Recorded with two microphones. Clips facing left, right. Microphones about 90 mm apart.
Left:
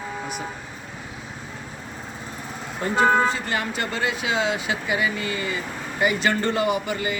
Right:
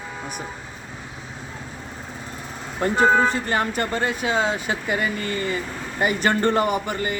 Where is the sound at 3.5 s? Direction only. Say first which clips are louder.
Right 3 dB; 45° right (ahead or behind).